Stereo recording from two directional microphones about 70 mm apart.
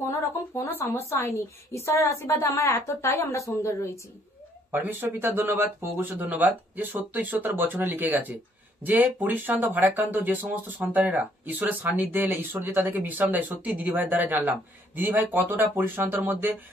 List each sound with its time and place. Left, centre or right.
0.0 s a woman's voice: left
4.7 s speech: right